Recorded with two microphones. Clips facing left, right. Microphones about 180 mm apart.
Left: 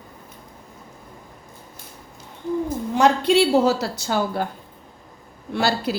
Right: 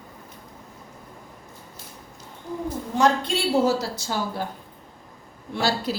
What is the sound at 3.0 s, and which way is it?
A woman's voice, 70° left (ahead or behind).